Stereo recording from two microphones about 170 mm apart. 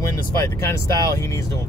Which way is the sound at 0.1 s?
20° left (ahead or behind).